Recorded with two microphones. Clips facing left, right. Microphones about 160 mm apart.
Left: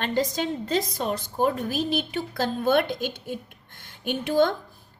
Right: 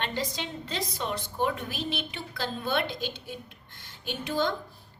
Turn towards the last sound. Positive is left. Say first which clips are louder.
# left 7 dB
turn(degrees=55)  # may be behind; listen again after turning